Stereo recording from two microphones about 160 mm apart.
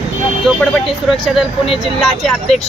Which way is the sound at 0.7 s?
Centre (ahead or behind).